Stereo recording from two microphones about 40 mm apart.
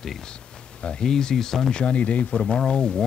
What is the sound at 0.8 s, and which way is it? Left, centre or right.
Speech, centre.